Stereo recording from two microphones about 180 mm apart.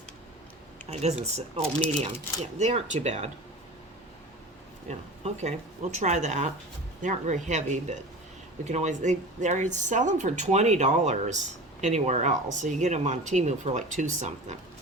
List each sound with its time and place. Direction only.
1.2 s speech: 35° right (ahead or behind)
4.9 s speech: 40° right (ahead or behind)